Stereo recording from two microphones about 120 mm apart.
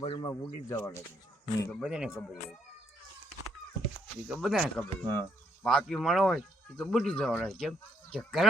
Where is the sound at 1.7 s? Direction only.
5° right (ahead or behind).